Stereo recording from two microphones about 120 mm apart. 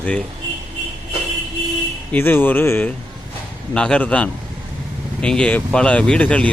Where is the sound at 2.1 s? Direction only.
15° left (ahead or behind).